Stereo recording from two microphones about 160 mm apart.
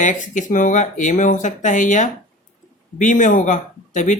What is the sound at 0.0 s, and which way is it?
Speech, 50° left (ahead or behind).